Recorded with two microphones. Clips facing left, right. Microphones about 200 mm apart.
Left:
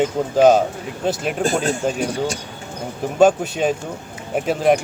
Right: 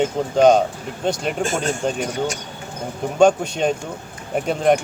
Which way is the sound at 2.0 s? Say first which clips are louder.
Left 1 dB; 30° left (ahead or behind).